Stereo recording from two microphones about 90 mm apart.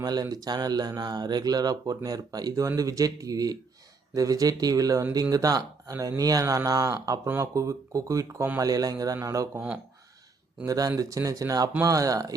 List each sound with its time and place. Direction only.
0.0 s speech: 50° right (ahead or behind)
10.7 s speech: 40° right (ahead or behind)